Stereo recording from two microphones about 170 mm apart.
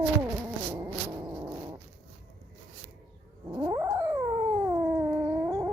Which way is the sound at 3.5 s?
25° right (ahead or behind).